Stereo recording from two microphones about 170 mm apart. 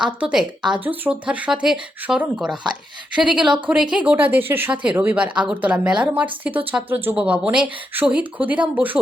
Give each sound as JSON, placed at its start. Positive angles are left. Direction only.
{"t": 0.0, "sound": "a woman's voice", "side_deg": -5}